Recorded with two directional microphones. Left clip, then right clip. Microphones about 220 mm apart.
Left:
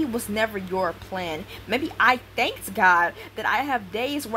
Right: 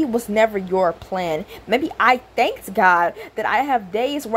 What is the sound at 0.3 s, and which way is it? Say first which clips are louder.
A woman's voice: right 10 dB; 15° right (ahead or behind).